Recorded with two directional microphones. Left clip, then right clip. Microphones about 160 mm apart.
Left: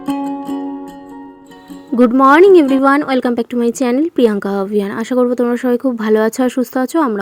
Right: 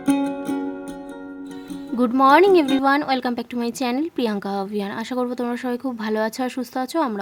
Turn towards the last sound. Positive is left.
turn(degrees=30)  # may be behind; listen again after turning